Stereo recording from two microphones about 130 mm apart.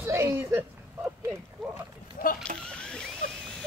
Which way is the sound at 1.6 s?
5° left (ahead or behind).